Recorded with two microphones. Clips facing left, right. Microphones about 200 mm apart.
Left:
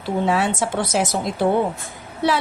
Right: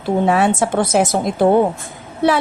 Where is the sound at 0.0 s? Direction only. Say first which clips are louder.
Right 5 dB; 55° right (ahead or behind).